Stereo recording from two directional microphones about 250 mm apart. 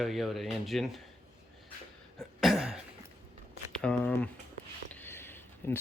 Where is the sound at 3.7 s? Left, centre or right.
Centre.